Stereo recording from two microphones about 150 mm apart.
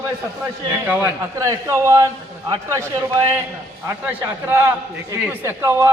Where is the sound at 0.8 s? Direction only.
15° right (ahead or behind).